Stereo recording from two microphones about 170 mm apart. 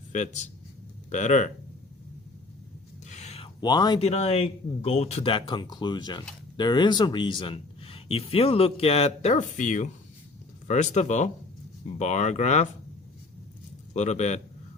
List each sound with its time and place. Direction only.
0.1 s speech: 45° left (ahead or behind)
3.1 s a sound: 40° left (ahead or behind); by 4.0 s 25° left (ahead or behind)
4.0 s speech: 35° left (ahead or behind)
13.9 s speech: 40° left (ahead or behind)